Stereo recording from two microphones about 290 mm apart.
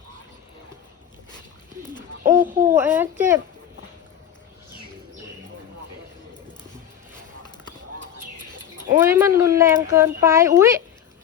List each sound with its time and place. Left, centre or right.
1.8 s bird: centre
2.4 s a sound: right
2.7 s speech: centre
9.0 s speech: centre